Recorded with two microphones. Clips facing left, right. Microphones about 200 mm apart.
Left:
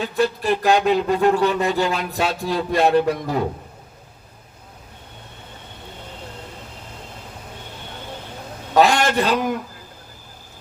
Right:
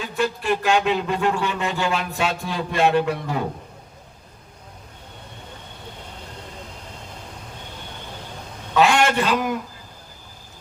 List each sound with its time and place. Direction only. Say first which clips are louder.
0.0 s speech: left 4 dB; 40° left (ahead or behind)
8.7 s a man's voice: left 1 dB; 40° left (ahead or behind)